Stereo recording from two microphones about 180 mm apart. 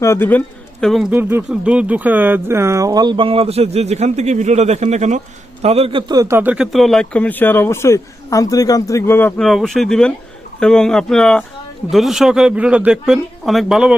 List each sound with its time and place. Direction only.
0.0 s speech: 15° left (ahead or behind)
1.1 s speech: 10° right (ahead or behind); by 9.3 s 15° left (ahead or behind)
9.4 s speech: centre (ahead or behind)